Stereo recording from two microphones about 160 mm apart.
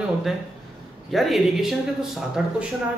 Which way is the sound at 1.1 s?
Centre (ahead or behind).